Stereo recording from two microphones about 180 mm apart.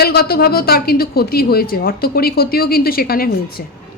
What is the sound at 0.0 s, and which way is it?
Speech, 60° left (ahead or behind).